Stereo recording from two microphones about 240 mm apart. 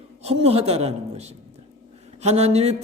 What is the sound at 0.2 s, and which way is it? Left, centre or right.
A man's voice, right.